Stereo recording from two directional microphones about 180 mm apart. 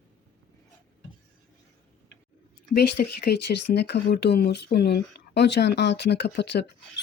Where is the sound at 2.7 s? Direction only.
60° left (ahead or behind).